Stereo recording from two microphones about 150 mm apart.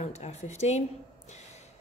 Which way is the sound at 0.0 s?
45° left (ahead or behind).